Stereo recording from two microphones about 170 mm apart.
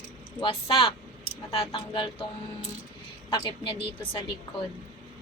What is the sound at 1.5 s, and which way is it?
Child singing, 30° left (ahead or behind).